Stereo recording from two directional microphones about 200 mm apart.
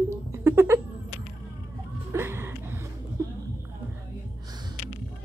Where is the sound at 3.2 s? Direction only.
15° right (ahead or behind).